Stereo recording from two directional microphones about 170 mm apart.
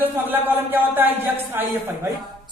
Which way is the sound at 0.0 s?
10° right (ahead or behind).